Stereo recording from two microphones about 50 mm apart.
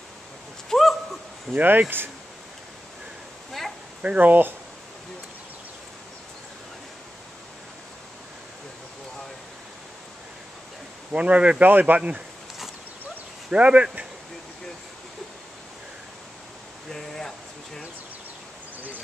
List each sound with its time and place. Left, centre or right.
0.7 s a sound: centre
1.5 s speech: right
4.0 s speech: right
11.1 s speech: right
13.5 s speech: right
16.9 s a sound: centre